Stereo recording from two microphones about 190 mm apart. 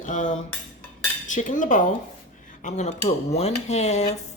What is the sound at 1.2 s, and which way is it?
Cutlery, 40° left (ahead or behind).